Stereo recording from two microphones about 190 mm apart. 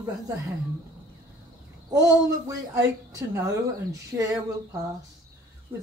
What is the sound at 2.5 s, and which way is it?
A woman's voice, 15° right (ahead or behind).